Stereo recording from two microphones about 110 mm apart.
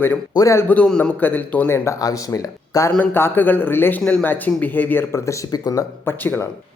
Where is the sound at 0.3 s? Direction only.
30° left (ahead or behind).